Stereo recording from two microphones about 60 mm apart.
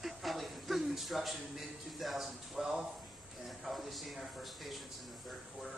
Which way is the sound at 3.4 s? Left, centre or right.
Centre.